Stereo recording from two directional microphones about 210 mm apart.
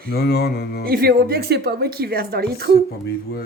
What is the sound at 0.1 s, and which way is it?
Speech, 50° left (ahead or behind).